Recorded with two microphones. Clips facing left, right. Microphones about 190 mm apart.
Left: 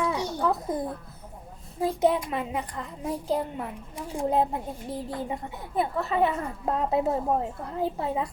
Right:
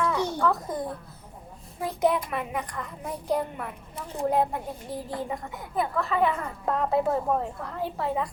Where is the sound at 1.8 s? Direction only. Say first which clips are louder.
Left 1 dB; 25° left (ahead or behind).